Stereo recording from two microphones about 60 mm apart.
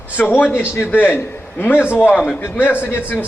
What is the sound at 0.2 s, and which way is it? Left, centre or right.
Speech, left.